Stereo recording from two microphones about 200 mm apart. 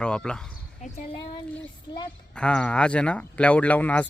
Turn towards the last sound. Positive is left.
turn(degrees=10)  # may be behind; listen again after turning